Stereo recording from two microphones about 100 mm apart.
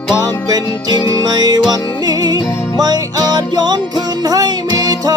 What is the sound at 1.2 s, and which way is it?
Music, 40° right (ahead or behind).